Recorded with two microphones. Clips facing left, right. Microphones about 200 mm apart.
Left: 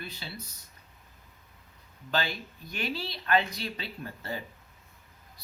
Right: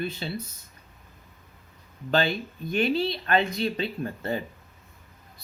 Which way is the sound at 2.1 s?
25° right (ahead or behind).